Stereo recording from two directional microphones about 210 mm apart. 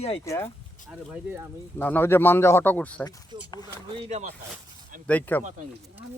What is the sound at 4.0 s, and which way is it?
Speech, 30° right (ahead or behind).